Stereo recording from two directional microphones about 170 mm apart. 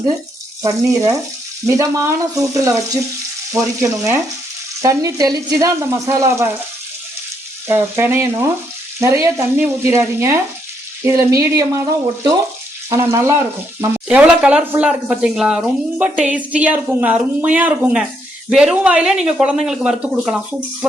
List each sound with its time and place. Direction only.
0.6 s speech: 20° right (ahead or behind)
7.7 s speech: 15° right (ahead or behind)